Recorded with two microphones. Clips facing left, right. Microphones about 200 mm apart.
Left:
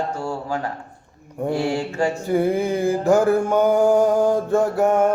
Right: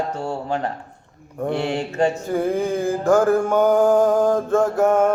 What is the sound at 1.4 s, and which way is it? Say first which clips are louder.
Mantra: even; 10° left (ahead or behind).